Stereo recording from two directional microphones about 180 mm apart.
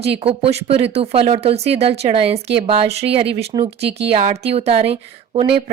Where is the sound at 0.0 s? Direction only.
35° right (ahead or behind).